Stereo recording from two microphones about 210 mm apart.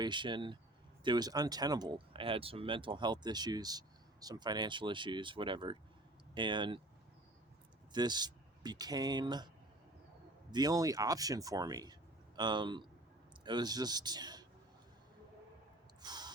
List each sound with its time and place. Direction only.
0.0 s speech: 20° right (ahead or behind)
7.9 s speech: 20° right (ahead or behind)
10.5 s speech: 20° right (ahead or behind)
16.0 s a sound: 20° right (ahead or behind)